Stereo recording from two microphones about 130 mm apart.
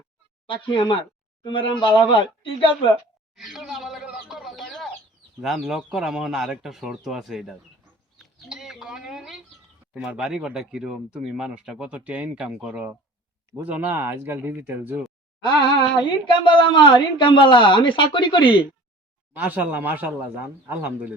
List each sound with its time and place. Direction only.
0.4 s a woman's voice: 40° left (ahead or behind)
3.3 s chicken: centre (ahead or behind)
5.4 s speech: centre (ahead or behind)
16.0 s a woman's voice: 35° left (ahead or behind)
19.3 s speech: 10° right (ahead or behind)